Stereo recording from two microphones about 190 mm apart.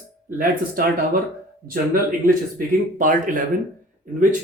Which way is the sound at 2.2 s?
45° right (ahead or behind).